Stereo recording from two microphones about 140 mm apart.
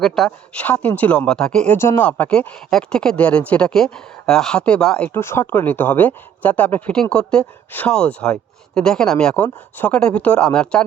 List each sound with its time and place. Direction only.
0.0 s speech: 5° left (ahead or behind)
1.8 s speech: 20° left (ahead or behind)